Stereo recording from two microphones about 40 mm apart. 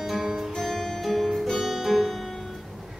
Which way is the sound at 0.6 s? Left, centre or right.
Centre.